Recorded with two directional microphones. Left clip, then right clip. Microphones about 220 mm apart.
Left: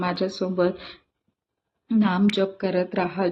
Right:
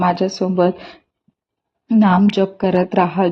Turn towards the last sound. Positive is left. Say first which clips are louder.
# right 8 dB
turn(degrees=-40)  # may be behind; listen again after turning